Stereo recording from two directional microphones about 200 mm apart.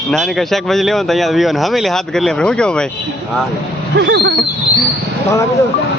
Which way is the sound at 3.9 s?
60° right (ahead or behind).